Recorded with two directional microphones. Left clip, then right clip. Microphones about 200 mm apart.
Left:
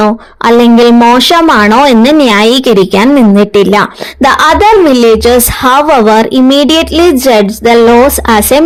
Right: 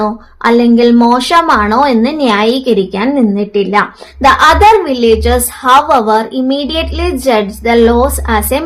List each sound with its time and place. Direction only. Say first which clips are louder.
0.0 s a woman's voice: left 5 dB; 45° left (ahead or behind)